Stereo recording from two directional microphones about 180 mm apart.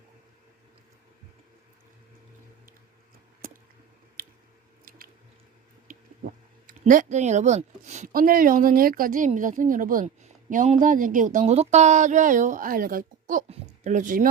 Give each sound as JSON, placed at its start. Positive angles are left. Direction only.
{"t": 3.4, "sound": "a sound", "side_deg": -50}
{"t": 4.2, "sound": "squish", "side_deg": -55}
{"t": 6.7, "sound": "speech", "side_deg": -45}